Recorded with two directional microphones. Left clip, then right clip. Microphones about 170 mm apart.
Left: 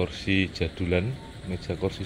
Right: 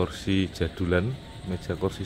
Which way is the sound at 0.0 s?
25° right (ahead or behind).